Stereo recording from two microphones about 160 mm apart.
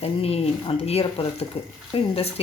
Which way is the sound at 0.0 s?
40° left (ahead or behind).